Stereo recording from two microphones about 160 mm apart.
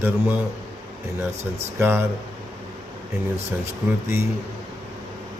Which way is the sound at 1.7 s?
15° right (ahead or behind).